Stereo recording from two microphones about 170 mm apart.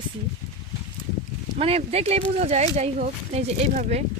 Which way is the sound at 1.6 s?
35° right (ahead or behind).